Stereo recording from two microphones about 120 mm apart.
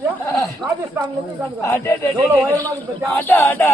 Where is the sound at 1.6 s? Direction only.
20° left (ahead or behind).